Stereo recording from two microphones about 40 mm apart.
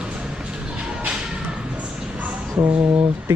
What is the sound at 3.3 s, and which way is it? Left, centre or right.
Speech, right.